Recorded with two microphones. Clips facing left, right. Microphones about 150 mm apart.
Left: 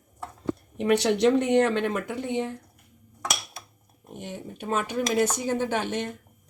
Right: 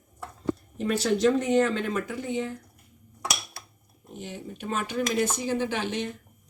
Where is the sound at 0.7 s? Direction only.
70° left (ahead or behind).